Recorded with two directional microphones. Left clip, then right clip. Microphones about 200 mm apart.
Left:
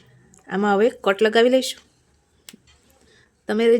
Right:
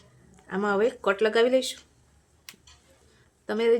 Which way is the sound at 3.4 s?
35° left (ahead or behind).